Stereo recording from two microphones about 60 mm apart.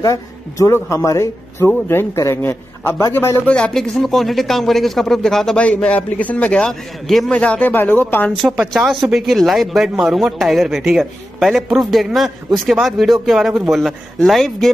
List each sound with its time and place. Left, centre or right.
0.0 s a man's voice: left
2.4 s a man's voice: left
3.4 s a man's voice: centre
3.7 s speech: centre
5.6 s a man's voice: centre
6.7 s speech: centre
7.3 s a man's voice: left
7.7 s speech: left
8.3 s speech: centre